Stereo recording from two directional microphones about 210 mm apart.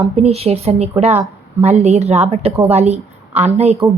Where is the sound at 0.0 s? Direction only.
30° right (ahead or behind).